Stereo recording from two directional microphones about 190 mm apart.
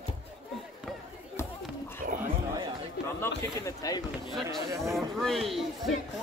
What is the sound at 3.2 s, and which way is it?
Speech, 15° left (ahead or behind).